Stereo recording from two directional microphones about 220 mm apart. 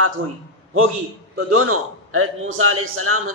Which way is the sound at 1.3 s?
80° right.